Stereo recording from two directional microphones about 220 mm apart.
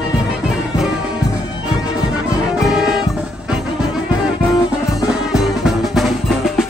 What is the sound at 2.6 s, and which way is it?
Music, centre (ahead or behind).